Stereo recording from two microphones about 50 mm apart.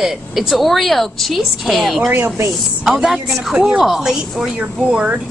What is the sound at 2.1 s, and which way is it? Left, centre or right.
Speech, right.